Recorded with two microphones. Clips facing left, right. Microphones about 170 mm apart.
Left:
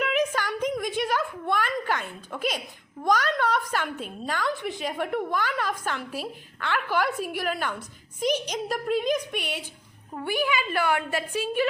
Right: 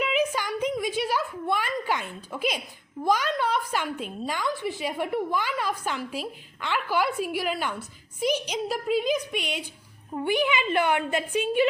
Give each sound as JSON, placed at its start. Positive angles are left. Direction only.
{"t": 0.2, "sound": "a sound", "side_deg": -10}
{"t": 3.0, "sound": "a woman's voice", "side_deg": -10}
{"t": 10.2, "sound": "a woman's voice", "side_deg": -20}